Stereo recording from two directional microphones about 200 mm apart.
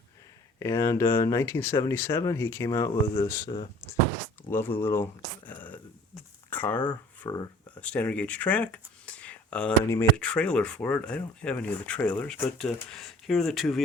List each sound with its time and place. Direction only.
0.6 s speech: 15° left (ahead or behind)
5.5 s a sound: 10° left (ahead or behind)
7.9 s speech: 5° left (ahead or behind)